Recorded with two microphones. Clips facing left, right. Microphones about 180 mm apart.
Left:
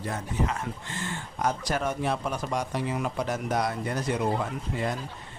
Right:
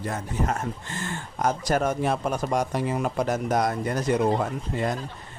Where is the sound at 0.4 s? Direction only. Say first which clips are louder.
Right 3 dB; 45° right (ahead or behind).